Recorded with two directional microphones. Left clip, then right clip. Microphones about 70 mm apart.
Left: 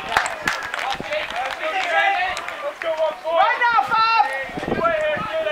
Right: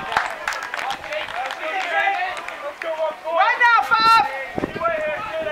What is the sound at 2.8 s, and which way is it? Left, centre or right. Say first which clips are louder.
Speech: left 2 dB; left.